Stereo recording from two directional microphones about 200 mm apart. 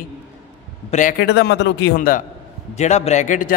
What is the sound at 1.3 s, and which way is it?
Speech, 60° left (ahead or behind).